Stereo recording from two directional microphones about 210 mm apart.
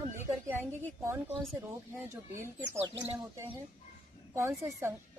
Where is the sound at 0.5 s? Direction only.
10° right (ahead or behind).